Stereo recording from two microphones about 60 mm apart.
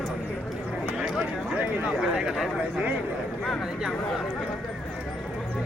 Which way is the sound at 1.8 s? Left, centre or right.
Centre.